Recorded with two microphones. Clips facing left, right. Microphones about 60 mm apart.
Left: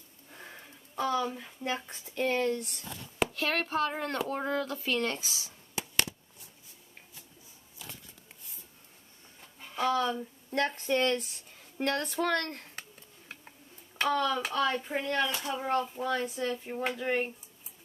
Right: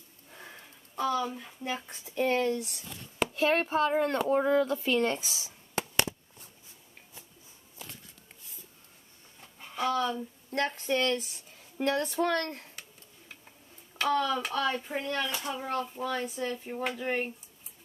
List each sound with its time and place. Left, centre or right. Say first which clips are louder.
0.3 s speech: even; centre
3.3 s speech: right 6 dB; centre
5.8 s a sound: right 5 dB; right
9.6 s speech: left 1 dB; centre
14.0 s speech: right 1 dB; centre